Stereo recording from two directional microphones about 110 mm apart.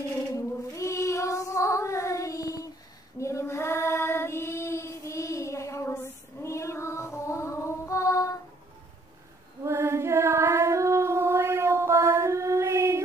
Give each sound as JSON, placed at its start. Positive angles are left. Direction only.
{"t": 0.7, "sound": "child singing", "side_deg": 30}
{"t": 9.7, "sound": "female singing", "side_deg": -25}